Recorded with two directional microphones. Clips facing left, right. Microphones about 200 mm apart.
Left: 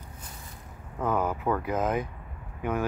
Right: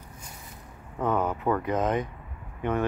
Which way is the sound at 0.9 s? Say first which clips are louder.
Right 1 dB; 5° left (ahead or behind).